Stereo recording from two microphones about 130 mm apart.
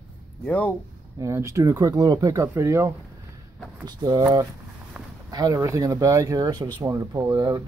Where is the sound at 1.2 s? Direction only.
20° right (ahead or behind).